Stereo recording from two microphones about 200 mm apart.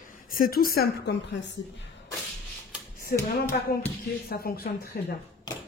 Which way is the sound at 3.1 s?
45° left (ahead or behind).